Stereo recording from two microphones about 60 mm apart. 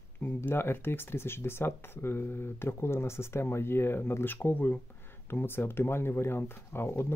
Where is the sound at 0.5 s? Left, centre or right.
Left.